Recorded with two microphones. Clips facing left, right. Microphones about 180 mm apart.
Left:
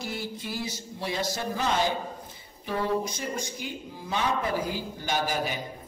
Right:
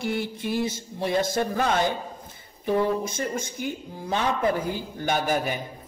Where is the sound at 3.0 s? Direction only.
50° right (ahead or behind).